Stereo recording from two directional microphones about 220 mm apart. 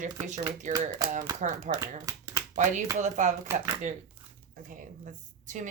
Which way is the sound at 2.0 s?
15° right (ahead or behind).